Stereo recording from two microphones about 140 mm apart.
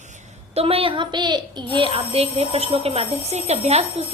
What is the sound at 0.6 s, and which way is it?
Speech, 45° right (ahead or behind).